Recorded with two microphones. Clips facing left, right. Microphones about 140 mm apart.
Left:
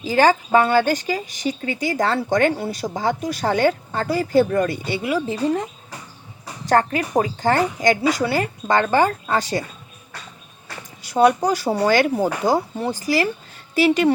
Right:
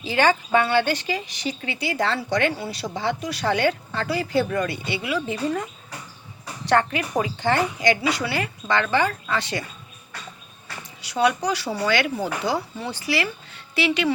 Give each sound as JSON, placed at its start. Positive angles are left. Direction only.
{"t": 0.0, "sound": "speech", "side_deg": 40}
{"t": 6.4, "sound": "a sound", "side_deg": 40}
{"t": 7.2, "sound": "speech", "side_deg": 40}
{"t": 11.0, "sound": "speech", "side_deg": 50}